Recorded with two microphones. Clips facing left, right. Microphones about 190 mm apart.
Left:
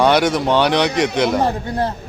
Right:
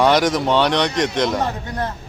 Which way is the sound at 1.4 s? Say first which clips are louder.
Left 5 dB; 30° left (ahead or behind).